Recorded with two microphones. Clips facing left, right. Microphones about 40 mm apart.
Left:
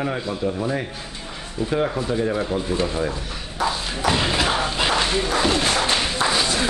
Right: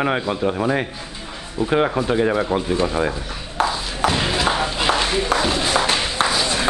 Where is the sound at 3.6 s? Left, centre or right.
Right.